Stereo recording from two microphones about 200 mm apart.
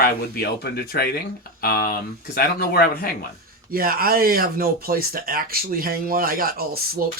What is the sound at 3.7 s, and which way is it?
Speech, 45° right (ahead or behind).